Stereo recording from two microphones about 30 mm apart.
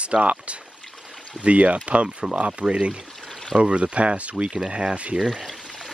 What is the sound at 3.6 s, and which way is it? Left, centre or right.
Speech, right.